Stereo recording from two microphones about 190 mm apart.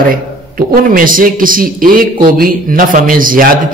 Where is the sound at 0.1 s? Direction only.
45° right (ahead or behind).